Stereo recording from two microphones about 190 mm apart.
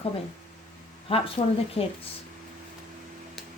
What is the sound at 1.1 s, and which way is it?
Speech, 30° left (ahead or behind).